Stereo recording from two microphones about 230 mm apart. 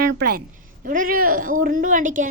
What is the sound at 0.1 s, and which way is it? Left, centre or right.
A woman's voice, right.